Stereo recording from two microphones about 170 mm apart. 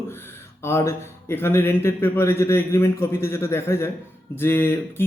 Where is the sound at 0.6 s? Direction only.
15° left (ahead or behind).